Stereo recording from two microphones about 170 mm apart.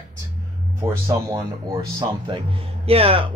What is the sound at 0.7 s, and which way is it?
Speech, 15° right (ahead or behind).